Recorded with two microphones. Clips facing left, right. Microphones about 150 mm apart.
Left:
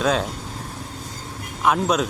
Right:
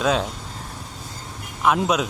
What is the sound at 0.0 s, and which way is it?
Speech, centre (ahead or behind).